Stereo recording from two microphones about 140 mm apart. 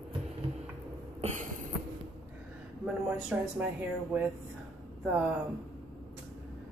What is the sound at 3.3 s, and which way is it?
Speech, 15° right (ahead or behind).